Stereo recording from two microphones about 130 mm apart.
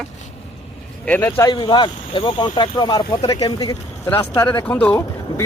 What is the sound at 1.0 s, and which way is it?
Speech, 15° left (ahead or behind).